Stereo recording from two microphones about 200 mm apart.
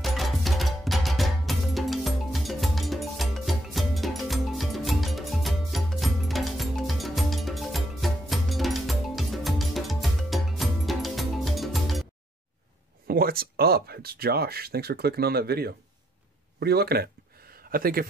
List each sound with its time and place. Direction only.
0.0 s music: centre (ahead or behind)
13.0 s a man's voice: 50° right (ahead or behind)